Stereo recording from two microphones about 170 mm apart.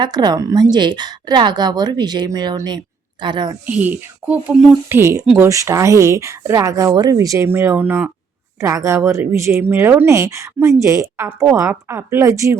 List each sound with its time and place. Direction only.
0.0 s a woman's voice: 25° right (ahead or behind)
3.7 s speech: 10° right (ahead or behind)